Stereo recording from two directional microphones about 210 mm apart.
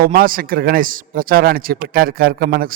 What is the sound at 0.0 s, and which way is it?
A man's voice, 45° right (ahead or behind).